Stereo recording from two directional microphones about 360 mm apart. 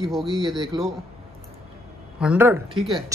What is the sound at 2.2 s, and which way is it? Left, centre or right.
Speech, centre.